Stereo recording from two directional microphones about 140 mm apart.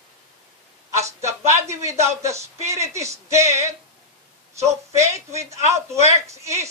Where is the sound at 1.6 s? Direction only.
20° right (ahead or behind).